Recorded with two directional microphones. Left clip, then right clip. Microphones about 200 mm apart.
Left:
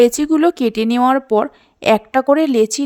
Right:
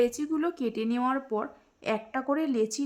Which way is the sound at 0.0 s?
45° left (ahead or behind).